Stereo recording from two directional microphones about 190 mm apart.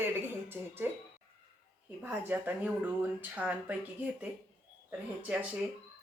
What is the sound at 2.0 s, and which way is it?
A woman's voice, 10° right (ahead or behind).